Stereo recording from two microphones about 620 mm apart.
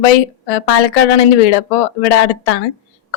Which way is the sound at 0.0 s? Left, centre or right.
Left.